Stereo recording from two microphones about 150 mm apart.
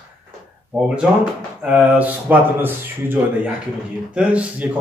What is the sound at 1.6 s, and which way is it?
Speech, 10° right (ahead or behind).